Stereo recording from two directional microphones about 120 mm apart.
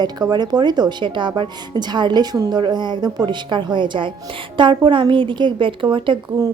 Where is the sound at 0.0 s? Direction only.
35° right (ahead or behind).